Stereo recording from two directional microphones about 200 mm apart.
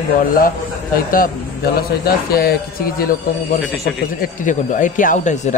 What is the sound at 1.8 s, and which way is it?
Speech, 50° left (ahead or behind).